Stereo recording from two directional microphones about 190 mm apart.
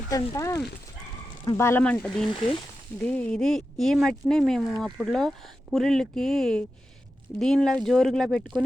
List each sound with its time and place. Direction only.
0.1 s speech: 15° left (ahead or behind); by 8.6 s centre (ahead or behind)